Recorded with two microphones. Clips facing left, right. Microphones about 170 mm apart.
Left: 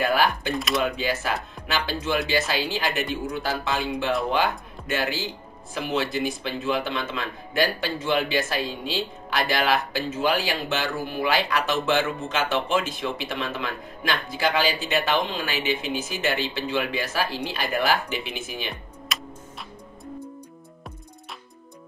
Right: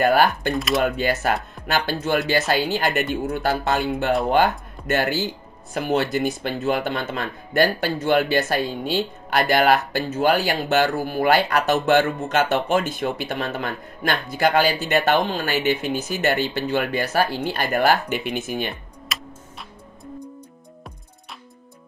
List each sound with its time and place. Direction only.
0.0 s speech: 50° right (ahead or behind)
0.5 s speech: centre (ahead or behind)
0.8 s speech: 50° right (ahead or behind)
5.8 s speech: 50° right (ahead or behind)
19.1 s music: centre (ahead or behind)